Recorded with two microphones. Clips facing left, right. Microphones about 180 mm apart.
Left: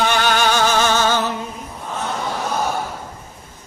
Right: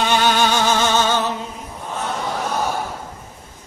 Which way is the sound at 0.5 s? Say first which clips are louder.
Left 1 dB; 20° right (ahead or behind).